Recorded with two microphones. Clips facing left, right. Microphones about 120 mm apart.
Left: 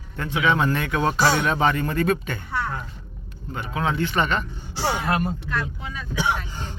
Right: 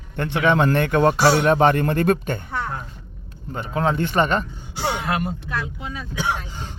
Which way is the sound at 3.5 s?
40° right (ahead or behind).